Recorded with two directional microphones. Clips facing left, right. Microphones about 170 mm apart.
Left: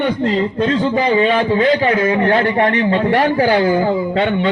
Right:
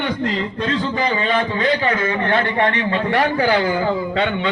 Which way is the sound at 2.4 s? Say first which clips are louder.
Left 4 dB; 40° left (ahead or behind).